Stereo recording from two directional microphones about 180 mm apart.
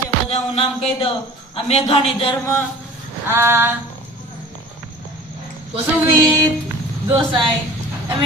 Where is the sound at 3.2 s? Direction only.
15° right (ahead or behind).